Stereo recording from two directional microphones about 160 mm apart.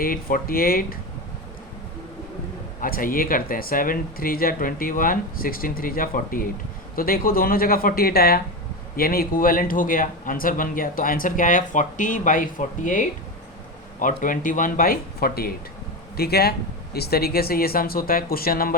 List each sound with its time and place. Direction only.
0.0 s speech: 65° left (ahead or behind)
2.8 s speech: 60° left (ahead or behind)